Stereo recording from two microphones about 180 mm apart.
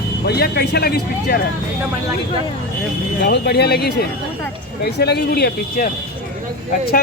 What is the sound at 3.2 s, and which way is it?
Speech, 65° left (ahead or behind).